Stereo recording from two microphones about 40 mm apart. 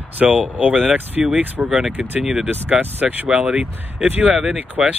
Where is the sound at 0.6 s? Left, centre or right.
Right.